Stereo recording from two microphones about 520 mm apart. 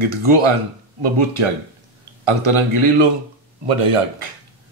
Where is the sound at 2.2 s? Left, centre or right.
Right.